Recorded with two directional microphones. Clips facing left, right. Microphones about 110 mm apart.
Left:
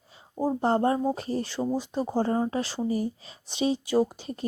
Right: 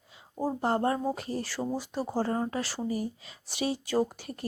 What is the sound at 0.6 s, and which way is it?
Speech, 25° left (ahead or behind).